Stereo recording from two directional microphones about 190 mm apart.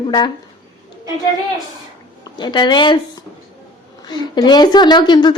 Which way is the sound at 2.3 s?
25° left (ahead or behind).